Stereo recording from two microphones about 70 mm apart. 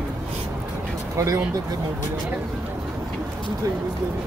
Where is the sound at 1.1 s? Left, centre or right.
Right.